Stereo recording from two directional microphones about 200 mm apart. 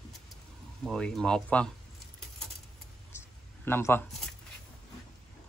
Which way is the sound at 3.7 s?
10° left (ahead or behind).